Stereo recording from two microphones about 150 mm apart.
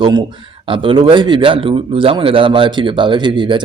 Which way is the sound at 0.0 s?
25° right (ahead or behind).